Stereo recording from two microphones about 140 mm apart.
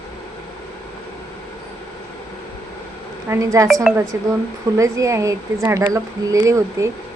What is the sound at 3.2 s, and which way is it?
Speech, 20° right (ahead or behind).